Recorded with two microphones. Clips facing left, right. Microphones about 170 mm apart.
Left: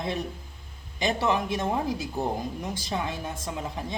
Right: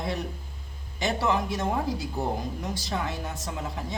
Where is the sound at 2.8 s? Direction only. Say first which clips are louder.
Left 1 dB; 15° left (ahead or behind).